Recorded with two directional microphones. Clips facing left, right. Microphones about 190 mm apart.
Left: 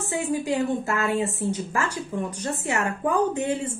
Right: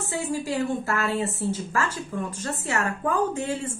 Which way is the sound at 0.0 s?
20° left (ahead or behind).